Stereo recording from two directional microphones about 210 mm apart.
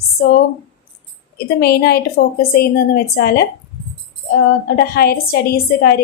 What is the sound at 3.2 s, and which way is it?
Speech, 50° left (ahead or behind).